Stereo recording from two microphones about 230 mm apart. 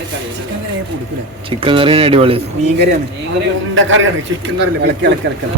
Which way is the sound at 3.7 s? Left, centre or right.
Right.